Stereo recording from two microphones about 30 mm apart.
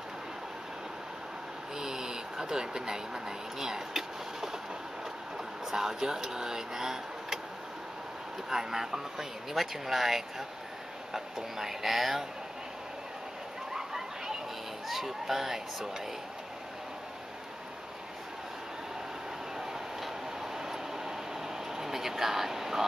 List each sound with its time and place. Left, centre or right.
1.8 s speech: centre
5.7 s speech: centre
8.5 s speech: centre
13.7 s a sound: centre
14.9 s speech: centre
20.0 s vehicle: centre